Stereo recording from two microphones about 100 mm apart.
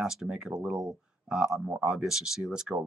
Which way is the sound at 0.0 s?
5° right (ahead or behind).